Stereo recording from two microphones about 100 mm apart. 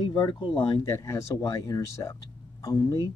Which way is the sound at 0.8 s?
30° left (ahead or behind).